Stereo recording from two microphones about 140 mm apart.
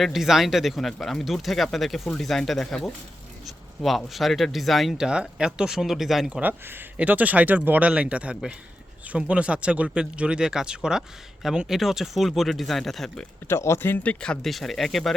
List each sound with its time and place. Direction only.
0.0 s speech: centre (ahead or behind)
13.5 s speech: 20° left (ahead or behind); by 15.1 s centre (ahead or behind)